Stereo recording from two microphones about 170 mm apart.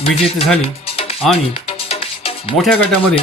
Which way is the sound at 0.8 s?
35° left (ahead or behind).